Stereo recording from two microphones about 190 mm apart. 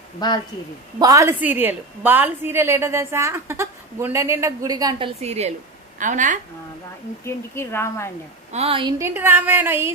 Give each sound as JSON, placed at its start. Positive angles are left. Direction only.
{"t": 0.2, "sound": "speech", "side_deg": 20}
{"t": 0.9, "sound": "a woman's voice", "side_deg": -20}
{"t": 7.2, "sound": "a woman's voice", "side_deg": 15}
{"t": 8.5, "sound": "a woman's voice", "side_deg": -30}